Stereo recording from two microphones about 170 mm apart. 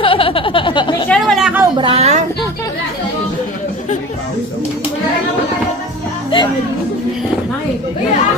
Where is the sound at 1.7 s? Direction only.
30° right (ahead or behind).